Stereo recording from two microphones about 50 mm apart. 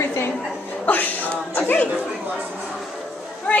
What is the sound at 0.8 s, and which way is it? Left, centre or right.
A woman's voice, left.